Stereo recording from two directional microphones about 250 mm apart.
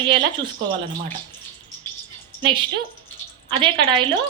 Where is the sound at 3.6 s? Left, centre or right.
Centre.